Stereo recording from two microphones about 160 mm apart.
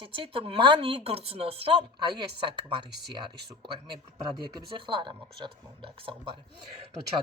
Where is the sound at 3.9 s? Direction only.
30° right (ahead or behind).